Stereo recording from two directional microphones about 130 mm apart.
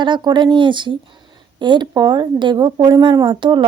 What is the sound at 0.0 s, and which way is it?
A woman's voice, 35° right (ahead or behind).